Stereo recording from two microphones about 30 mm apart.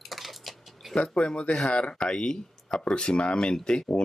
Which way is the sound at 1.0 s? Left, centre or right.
Left.